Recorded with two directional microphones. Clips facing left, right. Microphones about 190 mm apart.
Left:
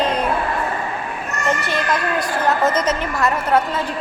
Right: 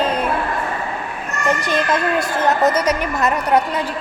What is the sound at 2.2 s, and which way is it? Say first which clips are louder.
A woman's voice: right 2 dB; 20° right (ahead or behind).